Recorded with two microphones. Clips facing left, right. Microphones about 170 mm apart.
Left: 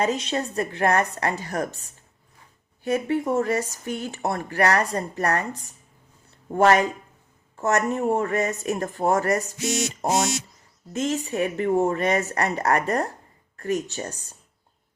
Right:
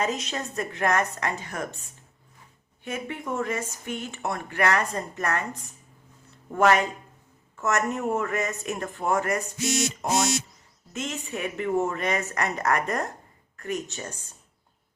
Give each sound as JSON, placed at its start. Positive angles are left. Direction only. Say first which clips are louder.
{"t": 0.0, "sound": "speech", "louder": "left 4 dB", "side_deg": 30}
{"t": 10.9, "sound": "speech", "louder": "left 8 dB", "side_deg": 35}